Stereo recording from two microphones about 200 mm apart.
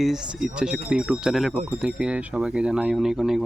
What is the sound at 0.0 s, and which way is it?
Speech, 5° right (ahead or behind).